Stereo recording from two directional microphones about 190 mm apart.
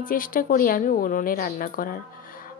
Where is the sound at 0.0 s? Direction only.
45° left (ahead or behind).